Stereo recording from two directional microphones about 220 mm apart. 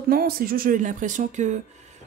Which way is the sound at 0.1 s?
45° right (ahead or behind).